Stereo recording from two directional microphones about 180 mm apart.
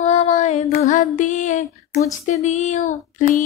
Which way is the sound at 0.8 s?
45° left (ahead or behind).